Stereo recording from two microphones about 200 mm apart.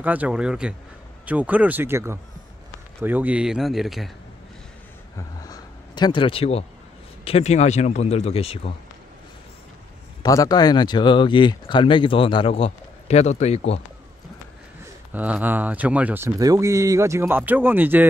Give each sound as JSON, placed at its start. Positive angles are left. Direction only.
{"t": 0.0, "sound": "a man's voice", "side_deg": -10}
{"t": 5.1, "sound": "a sound", "side_deg": 20}
{"t": 7.2, "sound": "speech", "side_deg": 30}
{"t": 10.2, "sound": "speech", "side_deg": 15}
{"t": 15.1, "sound": "speech", "side_deg": -10}